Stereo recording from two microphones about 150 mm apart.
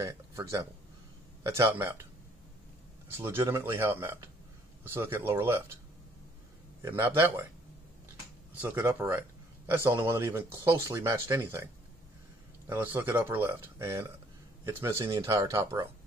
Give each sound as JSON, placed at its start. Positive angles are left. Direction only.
{"t": 0.0, "sound": "speech", "side_deg": -20}
{"t": 3.1, "sound": "speech", "side_deg": -15}
{"t": 6.8, "sound": "speech", "side_deg": -15}
{"t": 8.5, "sound": "speech", "side_deg": -10}